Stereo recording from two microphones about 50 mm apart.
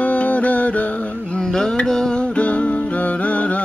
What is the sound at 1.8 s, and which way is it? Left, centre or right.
Music, centre.